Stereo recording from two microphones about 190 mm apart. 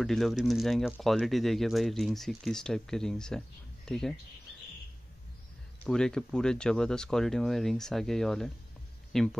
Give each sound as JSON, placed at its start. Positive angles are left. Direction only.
{"t": 0.0, "sound": "speech", "side_deg": 0}
{"t": 5.9, "sound": "speech", "side_deg": 5}